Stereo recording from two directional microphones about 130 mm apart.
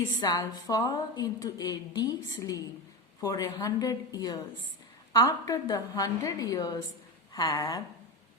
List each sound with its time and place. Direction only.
0.2 s a woman's voice: 30° left (ahead or behind)